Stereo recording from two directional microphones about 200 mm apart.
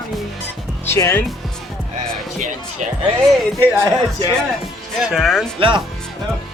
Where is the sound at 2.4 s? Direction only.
40° right (ahead or behind).